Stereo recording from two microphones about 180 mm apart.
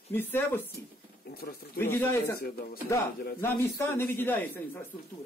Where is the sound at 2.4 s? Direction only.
55° left (ahead or behind).